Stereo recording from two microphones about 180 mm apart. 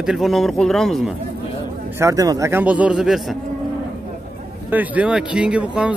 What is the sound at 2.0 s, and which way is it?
A man's voice, 20° right (ahead or behind).